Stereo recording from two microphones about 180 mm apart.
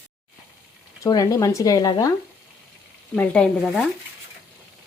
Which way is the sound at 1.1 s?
20° left (ahead or behind).